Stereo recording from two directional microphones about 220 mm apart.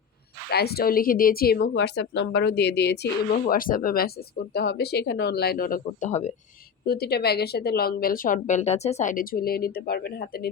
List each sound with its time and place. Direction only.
0.5 s a woman's voice: 45° left (ahead or behind)
6.8 s a woman's voice: 45° left (ahead or behind)